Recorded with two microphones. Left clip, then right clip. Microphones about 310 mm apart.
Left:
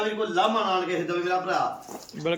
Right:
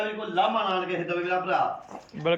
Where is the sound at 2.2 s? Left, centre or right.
Centre.